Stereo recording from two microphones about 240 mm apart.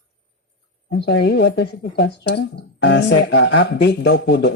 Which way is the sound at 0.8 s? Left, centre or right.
Left.